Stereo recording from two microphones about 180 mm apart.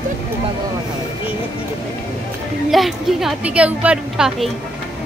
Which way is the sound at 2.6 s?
Centre (ahead or behind).